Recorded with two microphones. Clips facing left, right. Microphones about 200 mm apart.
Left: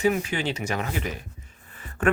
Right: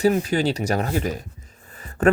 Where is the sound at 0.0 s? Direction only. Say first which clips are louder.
Right 5 dB; 35° right (ahead or behind).